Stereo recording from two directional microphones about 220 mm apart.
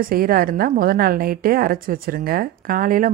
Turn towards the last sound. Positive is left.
turn(degrees=-40)  # may be behind; listen again after turning